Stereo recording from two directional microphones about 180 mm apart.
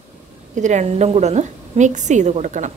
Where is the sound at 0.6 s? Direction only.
40° right (ahead or behind).